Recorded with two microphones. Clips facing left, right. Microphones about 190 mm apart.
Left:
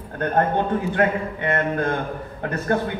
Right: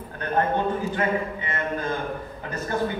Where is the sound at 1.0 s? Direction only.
60° left (ahead or behind).